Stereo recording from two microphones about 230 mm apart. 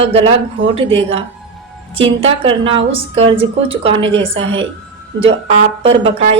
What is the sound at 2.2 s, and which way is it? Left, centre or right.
A woman's voice, right.